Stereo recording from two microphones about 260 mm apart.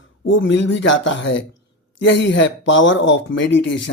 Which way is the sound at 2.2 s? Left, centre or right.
Left.